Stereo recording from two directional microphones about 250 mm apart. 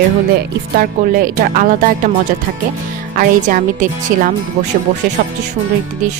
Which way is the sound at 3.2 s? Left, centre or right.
Right.